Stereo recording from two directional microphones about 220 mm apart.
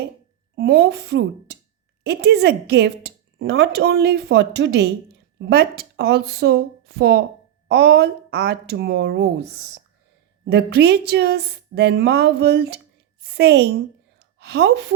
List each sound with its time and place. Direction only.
0.5 s speech: 45° right (ahead or behind)
10.4 s a woman's voice: 50° right (ahead or behind)